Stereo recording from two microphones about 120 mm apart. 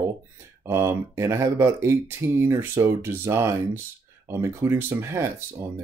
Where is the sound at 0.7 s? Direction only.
25° right (ahead or behind).